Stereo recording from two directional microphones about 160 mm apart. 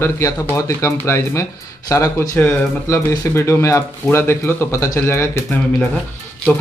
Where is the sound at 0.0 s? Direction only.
20° left (ahead or behind).